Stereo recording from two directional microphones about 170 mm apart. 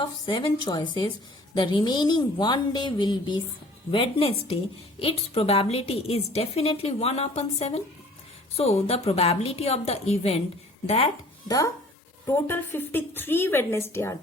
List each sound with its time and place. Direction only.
0.0 s a woman's voice: 30° left (ahead or behind)
11.4 s a woman's voice: 20° left (ahead or behind)